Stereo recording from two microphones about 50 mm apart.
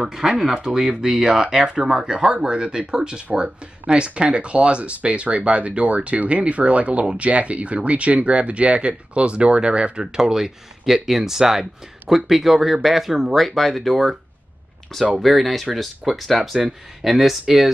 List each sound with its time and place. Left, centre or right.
0.0 s speech: centre